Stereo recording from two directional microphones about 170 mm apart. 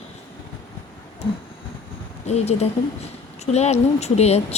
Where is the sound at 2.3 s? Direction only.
40° left (ahead or behind).